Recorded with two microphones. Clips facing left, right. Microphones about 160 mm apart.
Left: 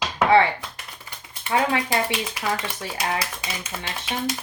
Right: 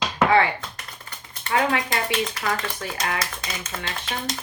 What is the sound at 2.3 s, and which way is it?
Speech, 10° left (ahead or behind).